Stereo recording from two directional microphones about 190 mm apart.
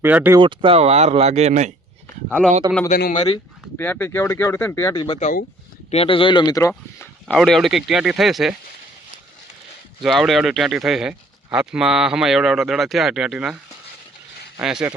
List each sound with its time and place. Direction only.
0.0 s speech: 10° right (ahead or behind)
0.3 s speech: 25° right (ahead or behind)
2.9 s speech: 45° left (ahead or behind)
3.2 s speech: 25° left (ahead or behind)
3.8 s speech: 10° left (ahead or behind)
7.3 s speech: centre (ahead or behind)
10.0 s speech: centre (ahead or behind)
14.6 s speech: 5° right (ahead or behind)